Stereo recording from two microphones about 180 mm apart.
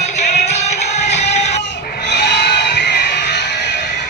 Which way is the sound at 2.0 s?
70° left (ahead or behind).